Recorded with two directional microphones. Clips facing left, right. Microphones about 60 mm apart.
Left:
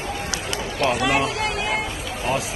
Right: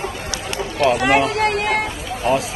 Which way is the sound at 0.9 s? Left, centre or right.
Right.